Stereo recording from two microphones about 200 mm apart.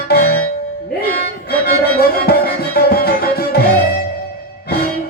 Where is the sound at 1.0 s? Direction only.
50° left (ahead or behind).